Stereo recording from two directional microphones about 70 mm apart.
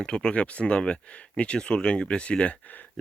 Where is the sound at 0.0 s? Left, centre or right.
Centre.